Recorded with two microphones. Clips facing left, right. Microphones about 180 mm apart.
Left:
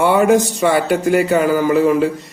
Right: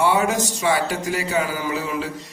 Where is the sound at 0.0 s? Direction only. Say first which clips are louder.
Left 7 dB; 55° left (ahead or behind).